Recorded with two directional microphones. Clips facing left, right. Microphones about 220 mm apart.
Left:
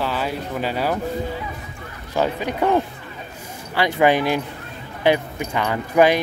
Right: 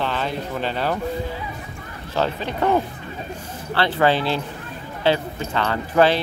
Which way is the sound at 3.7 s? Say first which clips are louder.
Left 2 dB; 15° left (ahead or behind).